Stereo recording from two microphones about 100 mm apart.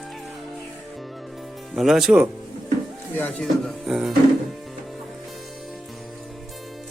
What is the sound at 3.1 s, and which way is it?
Speech, 20° left (ahead or behind).